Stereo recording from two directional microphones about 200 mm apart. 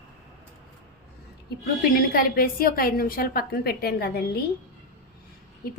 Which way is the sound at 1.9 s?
45° left (ahead or behind).